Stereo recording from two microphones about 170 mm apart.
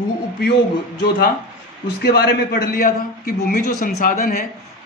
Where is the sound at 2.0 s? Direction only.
70° left (ahead or behind).